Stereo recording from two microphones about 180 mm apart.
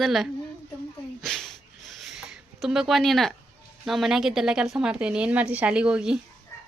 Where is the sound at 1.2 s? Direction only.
Centre (ahead or behind).